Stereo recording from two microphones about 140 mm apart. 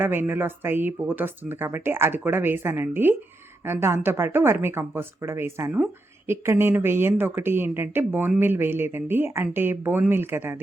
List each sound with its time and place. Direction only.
0.0 s speech: 15° right (ahead or behind)